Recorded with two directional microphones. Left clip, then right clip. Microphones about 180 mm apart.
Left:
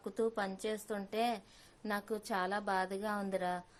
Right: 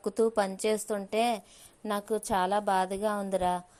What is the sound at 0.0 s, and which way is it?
A woman's voice, 25° right (ahead or behind).